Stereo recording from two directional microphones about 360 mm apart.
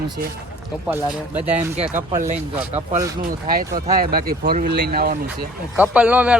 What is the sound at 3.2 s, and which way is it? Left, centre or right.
Speech, right.